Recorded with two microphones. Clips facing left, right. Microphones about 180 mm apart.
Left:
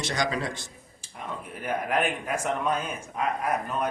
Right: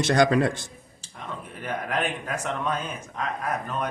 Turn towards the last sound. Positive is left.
turn(degrees=10)  # may be behind; listen again after turning